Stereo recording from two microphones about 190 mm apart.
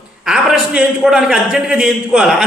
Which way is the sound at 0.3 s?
5° right (ahead or behind).